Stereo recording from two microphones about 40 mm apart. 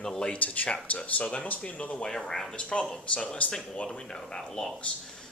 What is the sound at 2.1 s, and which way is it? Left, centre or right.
Speech, centre.